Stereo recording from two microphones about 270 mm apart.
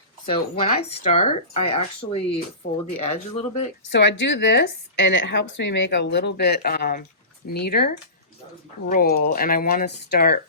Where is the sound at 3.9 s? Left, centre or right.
Left.